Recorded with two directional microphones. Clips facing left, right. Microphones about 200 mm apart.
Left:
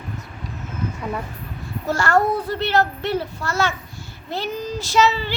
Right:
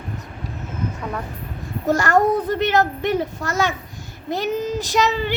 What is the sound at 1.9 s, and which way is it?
Child singing, 20° right (ahead or behind).